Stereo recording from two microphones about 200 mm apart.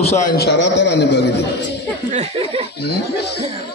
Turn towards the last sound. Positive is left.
turn(degrees=55)  # may be behind; listen again after turning